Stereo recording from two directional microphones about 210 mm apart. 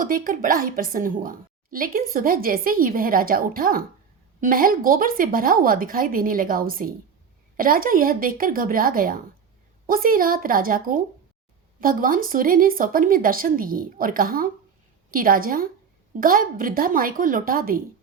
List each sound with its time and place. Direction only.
0.0 s a woman's voice: 40° right (ahead or behind)